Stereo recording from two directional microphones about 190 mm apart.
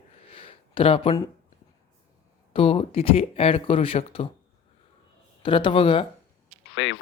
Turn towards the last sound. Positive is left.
turn(degrees=80)